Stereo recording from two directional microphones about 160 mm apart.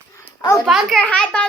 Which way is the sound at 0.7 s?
Centre (ahead or behind).